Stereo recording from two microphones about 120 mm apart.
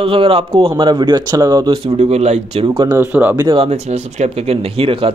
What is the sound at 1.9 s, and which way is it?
Speech, 65° right (ahead or behind).